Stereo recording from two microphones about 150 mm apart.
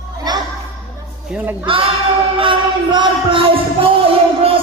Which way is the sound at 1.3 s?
10° right (ahead or behind).